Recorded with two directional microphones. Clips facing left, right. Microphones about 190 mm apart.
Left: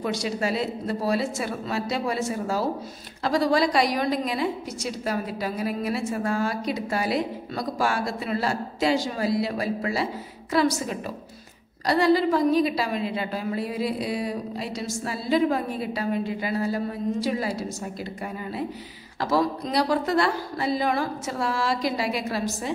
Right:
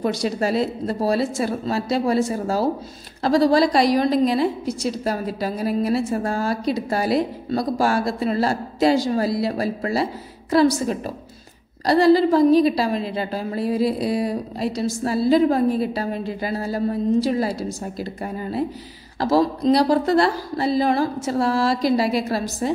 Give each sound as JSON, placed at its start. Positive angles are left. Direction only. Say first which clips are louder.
{"t": 0.0, "sound": "a woman's voice", "louder": "right 5 dB", "side_deg": -40}